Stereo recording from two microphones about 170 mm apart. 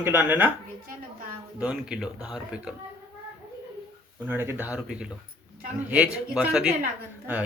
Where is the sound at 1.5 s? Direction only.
5° right (ahead or behind).